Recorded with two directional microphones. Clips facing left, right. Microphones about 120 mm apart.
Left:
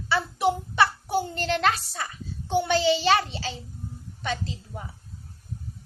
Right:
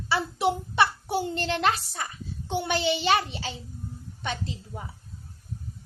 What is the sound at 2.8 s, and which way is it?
Speech, 25° left (ahead or behind).